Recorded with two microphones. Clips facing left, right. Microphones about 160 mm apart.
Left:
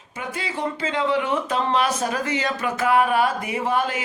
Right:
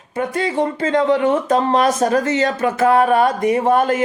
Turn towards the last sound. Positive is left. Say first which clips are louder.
# right 8 dB
turn(degrees=-45)  # may be behind; listen again after turning